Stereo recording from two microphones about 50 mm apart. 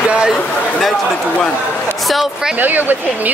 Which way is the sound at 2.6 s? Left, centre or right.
Right.